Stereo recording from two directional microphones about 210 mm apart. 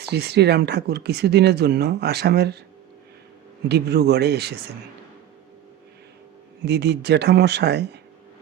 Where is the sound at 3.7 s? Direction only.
50° right (ahead or behind).